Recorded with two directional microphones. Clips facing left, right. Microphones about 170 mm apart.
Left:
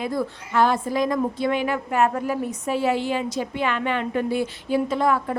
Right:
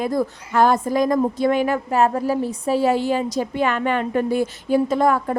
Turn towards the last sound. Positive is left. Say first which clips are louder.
# right 3 dB
turn(degrees=-45)  # may be behind; listen again after turning